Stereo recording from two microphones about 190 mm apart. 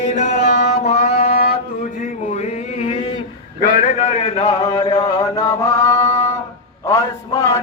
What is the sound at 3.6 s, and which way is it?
Mantra, 40° left (ahead or behind).